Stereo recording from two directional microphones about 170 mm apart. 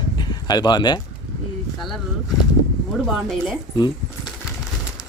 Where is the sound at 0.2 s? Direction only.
25° left (ahead or behind).